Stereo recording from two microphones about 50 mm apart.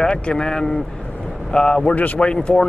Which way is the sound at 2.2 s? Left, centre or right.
Centre.